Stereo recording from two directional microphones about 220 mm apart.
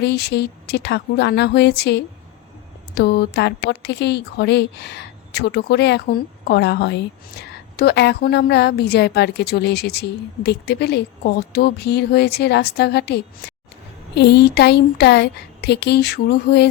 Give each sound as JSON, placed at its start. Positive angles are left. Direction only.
{"t": 0.0, "sound": "a woman's voice", "side_deg": 50}
{"t": 13.4, "sound": "a sound", "side_deg": 45}
{"t": 14.2, "sound": "a woman's voice", "side_deg": 50}